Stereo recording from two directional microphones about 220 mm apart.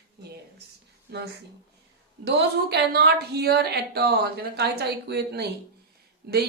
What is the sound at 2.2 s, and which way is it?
A woman's voice, 50° right (ahead or behind).